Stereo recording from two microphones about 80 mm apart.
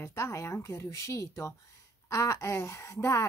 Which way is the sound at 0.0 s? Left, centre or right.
Left.